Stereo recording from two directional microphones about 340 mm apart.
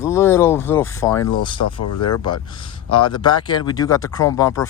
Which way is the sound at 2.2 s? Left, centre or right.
Centre.